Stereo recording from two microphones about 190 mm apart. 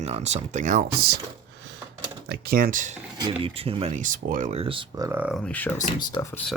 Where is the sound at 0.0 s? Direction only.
35° right (ahead or behind).